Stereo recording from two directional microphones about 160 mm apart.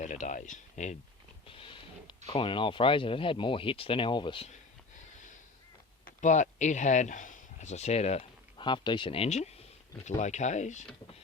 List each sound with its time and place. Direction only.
0.0 s speech: 50° left (ahead or behind)
1.5 s speech: 35° left (ahead or behind)
6.2 s speech: 50° left (ahead or behind)